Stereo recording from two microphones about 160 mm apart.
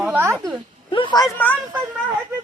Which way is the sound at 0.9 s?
30° left (ahead or behind).